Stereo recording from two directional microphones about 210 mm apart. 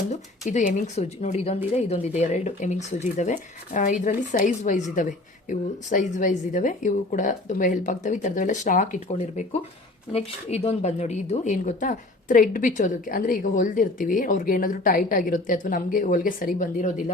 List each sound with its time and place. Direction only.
0.4 s speech: 35° left (ahead or behind)